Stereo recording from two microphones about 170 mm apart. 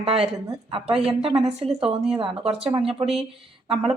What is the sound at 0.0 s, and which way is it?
Speech, 35° right (ahead or behind).